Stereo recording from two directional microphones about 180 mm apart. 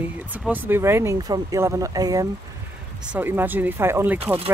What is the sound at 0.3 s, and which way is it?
Speech, 10° right (ahead or behind).